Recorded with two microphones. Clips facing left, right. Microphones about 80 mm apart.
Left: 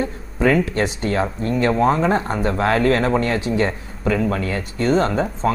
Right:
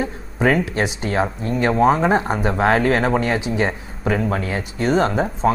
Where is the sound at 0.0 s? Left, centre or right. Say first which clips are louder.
Even; centre.